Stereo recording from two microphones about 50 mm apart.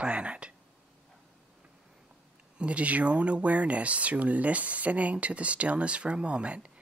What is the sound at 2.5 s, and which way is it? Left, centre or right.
Speech, right.